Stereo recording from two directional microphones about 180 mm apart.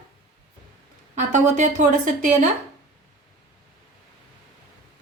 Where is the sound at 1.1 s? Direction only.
45° right (ahead or behind).